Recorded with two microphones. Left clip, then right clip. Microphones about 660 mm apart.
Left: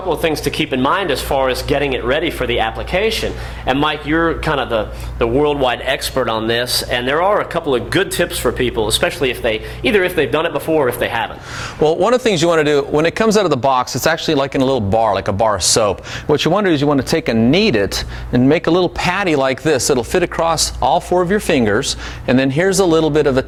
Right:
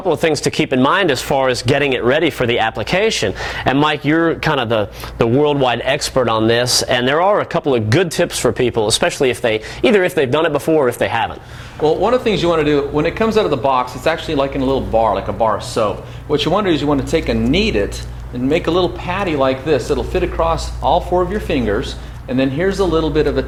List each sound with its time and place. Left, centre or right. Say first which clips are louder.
0.1 s speech: right 2 dB; right
11.8 s speech: left 1 dB; left